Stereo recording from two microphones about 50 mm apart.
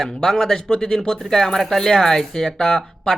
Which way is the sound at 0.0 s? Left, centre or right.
Centre.